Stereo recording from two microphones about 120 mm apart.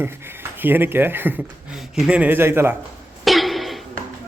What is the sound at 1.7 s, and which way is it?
Speech, 5° right (ahead or behind).